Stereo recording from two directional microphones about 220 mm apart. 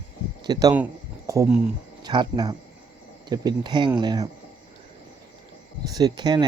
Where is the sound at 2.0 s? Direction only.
20° right (ahead or behind).